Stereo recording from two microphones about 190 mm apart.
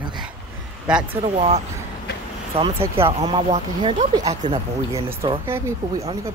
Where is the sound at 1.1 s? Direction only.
30° right (ahead or behind).